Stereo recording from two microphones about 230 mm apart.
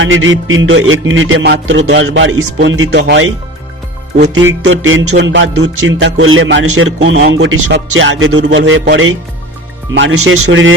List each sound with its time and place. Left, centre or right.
0.0 s music: right
4.6 s music: right